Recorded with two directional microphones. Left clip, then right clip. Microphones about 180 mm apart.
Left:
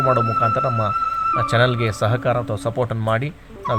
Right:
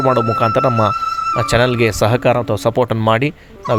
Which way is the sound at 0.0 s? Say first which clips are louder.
Right 3 dB; 45° right (ahead or behind).